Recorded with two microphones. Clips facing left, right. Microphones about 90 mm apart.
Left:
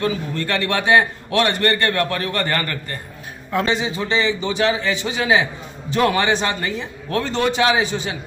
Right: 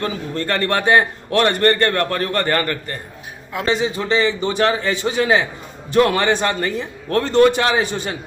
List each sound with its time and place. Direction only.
0.0 s a man's voice: 40° right (ahead or behind)
3.8 s a man's voice: 50° right (ahead or behind)